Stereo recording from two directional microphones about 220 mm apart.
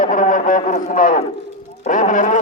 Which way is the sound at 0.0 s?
35° left (ahead or behind).